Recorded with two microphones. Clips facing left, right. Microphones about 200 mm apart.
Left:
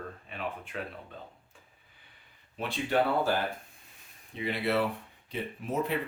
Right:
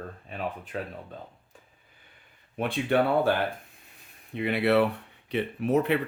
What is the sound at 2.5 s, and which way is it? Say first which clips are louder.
Speech: right 4 dB; 55° right (ahead or behind).